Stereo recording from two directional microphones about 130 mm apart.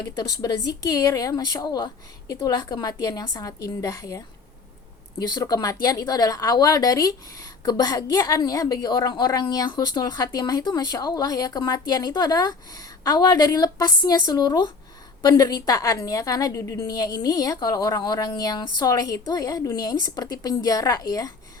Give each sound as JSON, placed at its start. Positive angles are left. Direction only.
{"t": 0.2, "sound": "a woman's voice", "side_deg": 30}
{"t": 5.3, "sound": "a woman's voice", "side_deg": 30}